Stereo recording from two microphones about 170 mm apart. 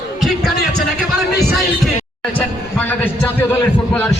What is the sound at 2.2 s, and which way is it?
Speech, 10° left (ahead or behind).